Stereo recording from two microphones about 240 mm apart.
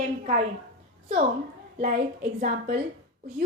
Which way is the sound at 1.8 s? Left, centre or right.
Right.